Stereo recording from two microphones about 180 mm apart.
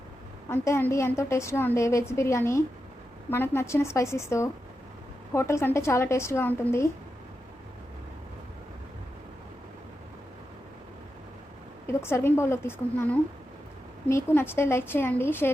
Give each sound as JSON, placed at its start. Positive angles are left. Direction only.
{"t": 0.4, "sound": "a woman's voice", "side_deg": 15}
{"t": 11.9, "sound": "a woman's voice", "side_deg": 15}